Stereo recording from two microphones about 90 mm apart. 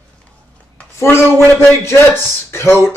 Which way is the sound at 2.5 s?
25° left (ahead or behind).